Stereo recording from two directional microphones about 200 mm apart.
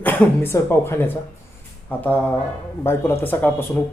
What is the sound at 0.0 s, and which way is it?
Speech, 10° left (ahead or behind).